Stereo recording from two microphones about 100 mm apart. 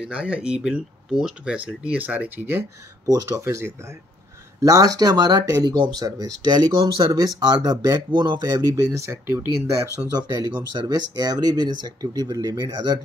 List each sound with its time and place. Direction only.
0.0 s speech: 10° right (ahead or behind)
3.1 s speech: 35° right (ahead or behind)
10.1 s speech: 40° right (ahead or behind)